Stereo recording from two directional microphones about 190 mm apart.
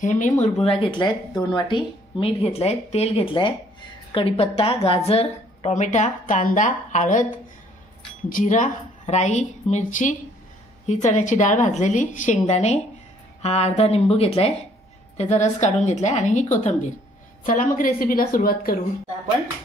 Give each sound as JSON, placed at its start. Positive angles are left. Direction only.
{"t": 0.0, "sound": "a woman's voice", "side_deg": 40}